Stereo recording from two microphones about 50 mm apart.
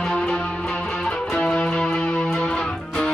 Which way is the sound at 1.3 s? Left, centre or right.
Left.